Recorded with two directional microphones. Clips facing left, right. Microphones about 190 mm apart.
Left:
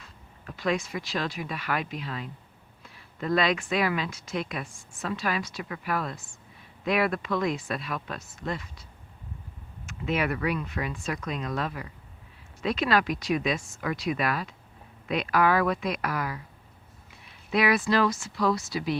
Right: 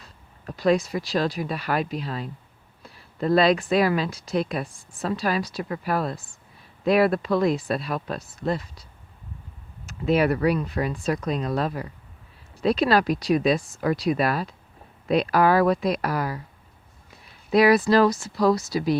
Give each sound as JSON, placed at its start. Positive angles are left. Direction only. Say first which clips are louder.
{"t": 0.0, "sound": "speech", "louder": "right 5 dB", "side_deg": -35}
{"t": 17.5, "sound": "speech", "louder": "right 7 dB", "side_deg": -35}